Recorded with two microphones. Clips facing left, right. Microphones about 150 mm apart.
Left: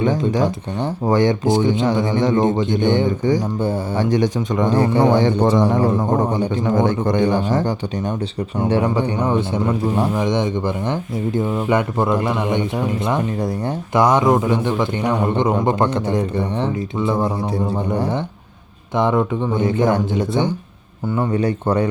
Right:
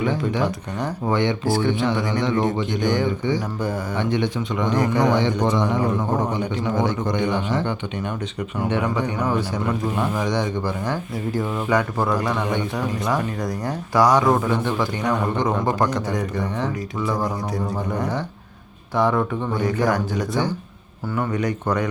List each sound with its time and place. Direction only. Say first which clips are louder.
0.0 s a man's voice: left 4 dB; 35° left (ahead or behind)
1.5 s speech: left 4 dB; 20° left (ahead or behind)
3.9 s a man's voice: left 5 dB; 40° left (ahead or behind)
4.7 s a man's voice: left 4 dB; 30° left (ahead or behind); by 7.2 s 50° left (ahead or behind)
7.2 s a man's voice: left 5 dB; 35° left (ahead or behind)